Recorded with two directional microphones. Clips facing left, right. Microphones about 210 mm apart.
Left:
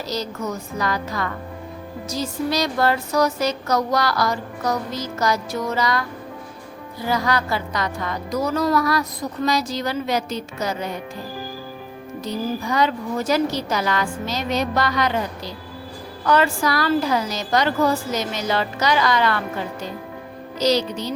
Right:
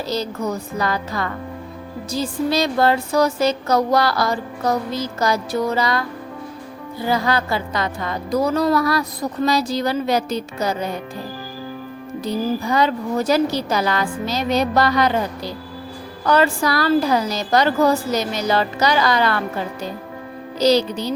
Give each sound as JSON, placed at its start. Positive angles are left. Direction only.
{"t": 0.1, "sound": "a woman's voice", "side_deg": -30}
{"t": 7.1, "sound": "a woman's voice", "side_deg": -30}
{"t": 12.2, "sound": "a woman's voice", "side_deg": -30}
{"t": 16.2, "sound": "a woman's voice", "side_deg": -35}
{"t": 20.6, "sound": "a woman's voice", "side_deg": -30}